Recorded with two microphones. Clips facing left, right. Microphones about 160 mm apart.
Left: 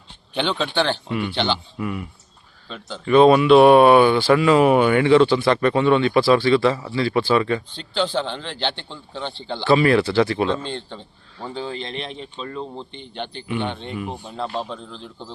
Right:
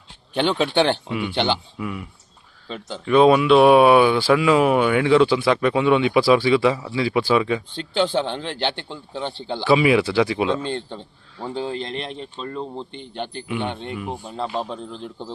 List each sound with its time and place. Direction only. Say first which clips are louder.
0.4 s speech: right 3 dB; 10° right (ahead or behind)
1.0 s speech: right 1 dB; 5° right (ahead or behind)
1.8 s speech: left 2 dB; centre (ahead or behind)